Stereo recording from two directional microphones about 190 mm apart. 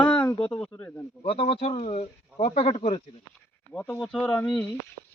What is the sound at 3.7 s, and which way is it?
Speech, 10° left (ahead or behind).